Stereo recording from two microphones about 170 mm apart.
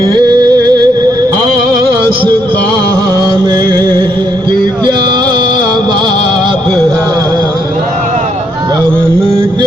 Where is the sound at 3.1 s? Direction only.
25° right (ahead or behind).